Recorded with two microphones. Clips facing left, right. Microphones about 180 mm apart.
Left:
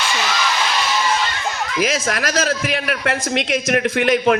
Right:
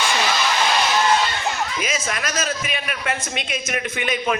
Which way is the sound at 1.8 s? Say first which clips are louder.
Left 6 dB; 60° left (ahead or behind).